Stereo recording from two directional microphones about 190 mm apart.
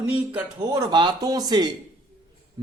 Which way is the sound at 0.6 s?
20° right (ahead or behind).